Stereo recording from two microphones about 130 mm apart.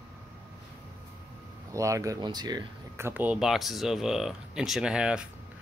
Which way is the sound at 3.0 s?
15° right (ahead or behind).